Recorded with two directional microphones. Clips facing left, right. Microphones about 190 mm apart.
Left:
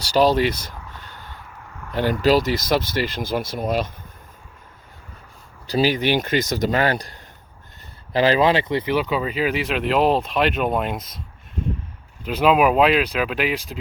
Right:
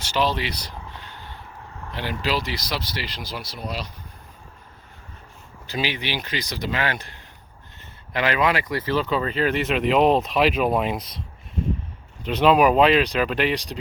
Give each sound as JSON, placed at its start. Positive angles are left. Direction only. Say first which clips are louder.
{"t": 0.0, "sound": "a sound", "louder": "left 7 dB", "side_deg": 40}
{"t": 1.9, "sound": "speech", "louder": "left 9 dB", "side_deg": 45}
{"t": 5.6, "sound": "speech", "louder": "left 8 dB", "side_deg": 40}